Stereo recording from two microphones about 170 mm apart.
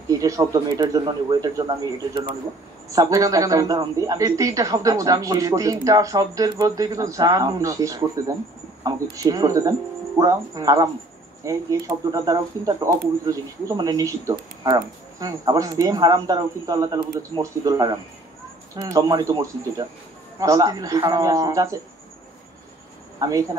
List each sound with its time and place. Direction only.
0.1 s speech: 20° right (ahead or behind)
2.9 s speech: 20° right (ahead or behind)
23.1 s speech: 20° right (ahead or behind)